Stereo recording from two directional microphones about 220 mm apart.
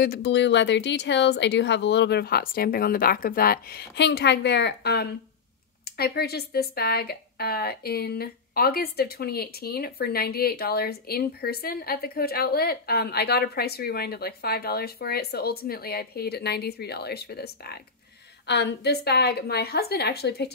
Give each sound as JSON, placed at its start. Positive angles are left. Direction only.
{"t": 0.0, "sound": "a woman's voice", "side_deg": 50}